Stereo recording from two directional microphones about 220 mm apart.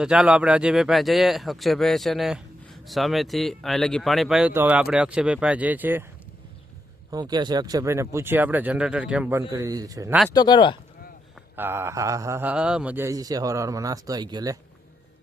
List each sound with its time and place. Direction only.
0.0 s speech: 5° right (ahead or behind)
7.1 s speech: 20° right (ahead or behind)
9.5 s speech: 15° right (ahead or behind)
10.2 s speech: 20° left (ahead or behind)
11.5 s speech: 10° right (ahead or behind)